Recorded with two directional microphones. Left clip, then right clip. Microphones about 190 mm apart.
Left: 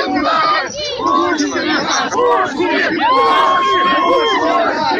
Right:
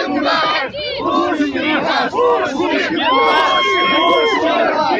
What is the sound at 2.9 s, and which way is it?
Crowd, 35° right (ahead or behind).